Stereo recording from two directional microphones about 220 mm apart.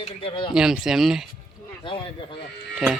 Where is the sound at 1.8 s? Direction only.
25° left (ahead or behind).